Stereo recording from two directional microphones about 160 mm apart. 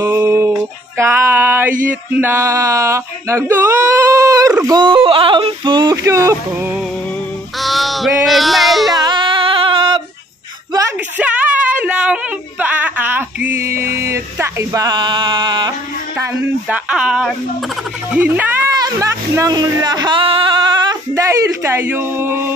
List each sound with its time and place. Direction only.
0.0 s a sound: 15° right (ahead or behind)
1.9 s male singing: 10° right (ahead or behind)
7.6 s speech: centre (ahead or behind)
8.9 s music: 30° right (ahead or behind)
11.1 s a woman's voice: 10° right (ahead or behind); by 15.7 s 30° right (ahead or behind)
16.6 s speech: 5° right (ahead or behind)
18.8 s male singing: 20° right (ahead or behind)